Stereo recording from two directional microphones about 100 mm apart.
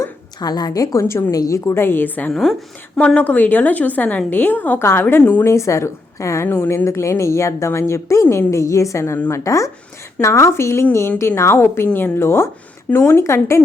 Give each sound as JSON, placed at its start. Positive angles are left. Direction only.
{"t": 0.3, "sound": "a woman's voice", "side_deg": 45}
{"t": 2.3, "sound": "a woman's voice", "side_deg": 0}
{"t": 3.2, "sound": "a woman's voice", "side_deg": 15}
{"t": 5.5, "sound": "a woman's voice", "side_deg": 30}